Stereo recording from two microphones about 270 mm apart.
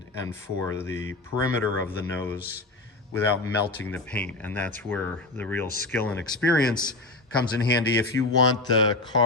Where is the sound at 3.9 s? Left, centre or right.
Centre.